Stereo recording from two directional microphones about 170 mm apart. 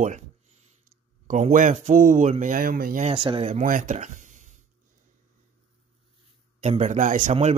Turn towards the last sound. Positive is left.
turn(degrees=-40)  # may be behind; listen again after turning